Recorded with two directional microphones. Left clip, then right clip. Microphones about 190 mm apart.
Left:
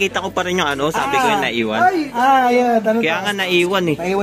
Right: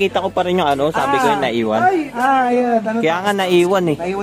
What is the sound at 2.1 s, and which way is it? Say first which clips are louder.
Speech: left 2 dB; 45° left (ahead or behind).